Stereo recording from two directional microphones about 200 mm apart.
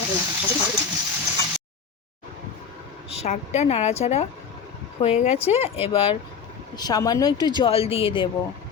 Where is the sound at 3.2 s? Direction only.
35° left (ahead or behind).